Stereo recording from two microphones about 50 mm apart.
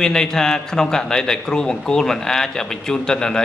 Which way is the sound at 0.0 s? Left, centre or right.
Centre.